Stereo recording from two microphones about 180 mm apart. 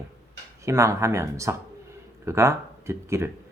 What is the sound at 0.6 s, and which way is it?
Speech, 15° right (ahead or behind).